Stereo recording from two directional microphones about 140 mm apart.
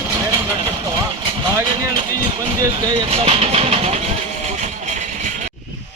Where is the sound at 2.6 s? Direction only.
30° right (ahead or behind).